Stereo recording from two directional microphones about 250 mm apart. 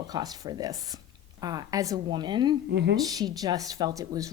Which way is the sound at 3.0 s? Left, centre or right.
Centre.